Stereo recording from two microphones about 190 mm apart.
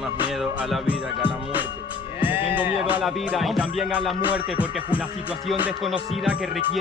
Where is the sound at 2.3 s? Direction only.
30° left (ahead or behind).